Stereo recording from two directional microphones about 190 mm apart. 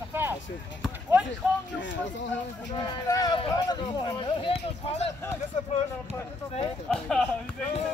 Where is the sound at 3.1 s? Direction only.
20° left (ahead or behind).